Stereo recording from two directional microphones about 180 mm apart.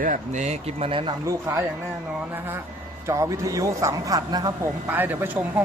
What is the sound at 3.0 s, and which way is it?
Speech, 15° right (ahead or behind).